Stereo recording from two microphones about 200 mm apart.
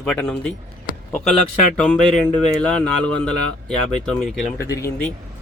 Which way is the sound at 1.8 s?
5° left (ahead or behind).